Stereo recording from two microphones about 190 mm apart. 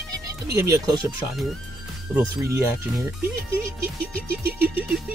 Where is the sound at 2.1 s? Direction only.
15° right (ahead or behind).